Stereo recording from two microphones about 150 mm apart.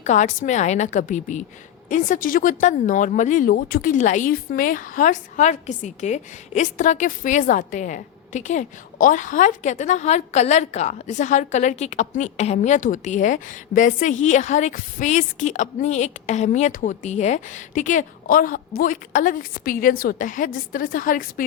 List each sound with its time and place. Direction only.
0.0 s a woman's voice: 55° left (ahead or behind)